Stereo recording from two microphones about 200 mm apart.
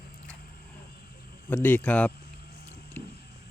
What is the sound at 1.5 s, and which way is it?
Speech, 10° left (ahead or behind).